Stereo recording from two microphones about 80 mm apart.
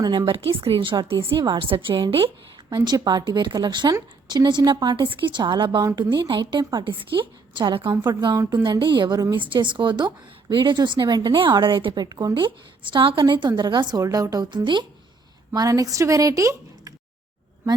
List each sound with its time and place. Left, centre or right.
0.0 s a woman's voice: right
0.8 s a woman's voice: right
8.4 s a woman's voice: right
9.3 s speech: right
12.0 s a woman's voice: right
12.3 s a woman's voice: right
13.6 s a woman's voice: right
14.5 s a woman's voice: right
15.5 s a woman's voice: right